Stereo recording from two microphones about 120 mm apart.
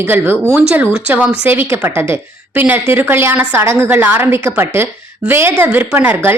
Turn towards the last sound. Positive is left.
turn(degrees=-20)  # may be behind; listen again after turning